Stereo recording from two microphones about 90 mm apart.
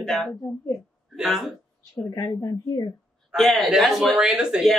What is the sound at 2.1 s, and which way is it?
Speech, 45° left (ahead or behind).